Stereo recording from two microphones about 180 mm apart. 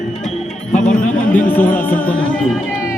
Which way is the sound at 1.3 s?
10° left (ahead or behind).